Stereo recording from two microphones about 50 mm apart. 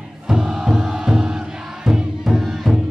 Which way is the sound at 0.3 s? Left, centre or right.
Centre.